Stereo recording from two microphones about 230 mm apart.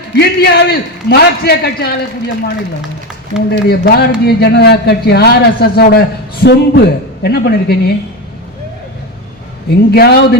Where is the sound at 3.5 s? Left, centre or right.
Left.